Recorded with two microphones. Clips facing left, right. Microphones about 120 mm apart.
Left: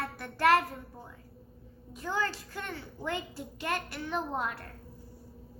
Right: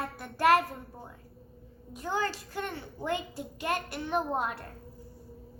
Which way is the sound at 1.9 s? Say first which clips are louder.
Right 1 dB; 15° right (ahead or behind).